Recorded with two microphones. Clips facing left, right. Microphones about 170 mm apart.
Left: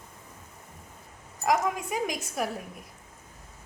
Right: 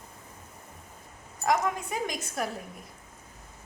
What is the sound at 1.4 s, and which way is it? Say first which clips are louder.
A woman's voice: left 1 dB; 10° left (ahead or behind).